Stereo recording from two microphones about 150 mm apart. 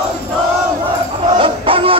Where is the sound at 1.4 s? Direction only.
35° right (ahead or behind).